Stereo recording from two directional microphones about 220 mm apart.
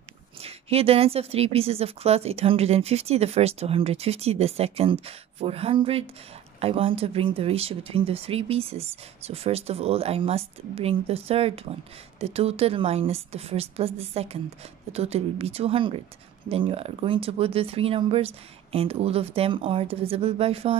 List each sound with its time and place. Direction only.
0.4 s a woman's voice: 25° right (ahead or behind)